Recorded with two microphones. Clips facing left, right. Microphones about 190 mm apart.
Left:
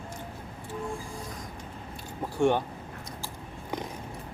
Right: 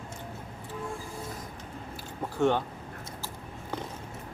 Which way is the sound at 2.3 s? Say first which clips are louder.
Left 1 dB; 15° left (ahead or behind).